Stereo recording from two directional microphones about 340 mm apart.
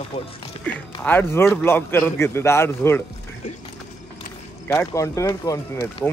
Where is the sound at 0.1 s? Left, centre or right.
Centre.